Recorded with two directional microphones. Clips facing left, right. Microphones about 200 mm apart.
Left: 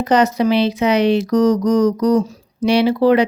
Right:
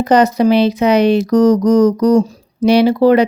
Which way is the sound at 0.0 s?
40° right (ahead or behind).